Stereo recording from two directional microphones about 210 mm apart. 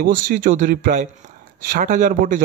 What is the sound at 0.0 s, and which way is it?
Speech, 40° right (ahead or behind).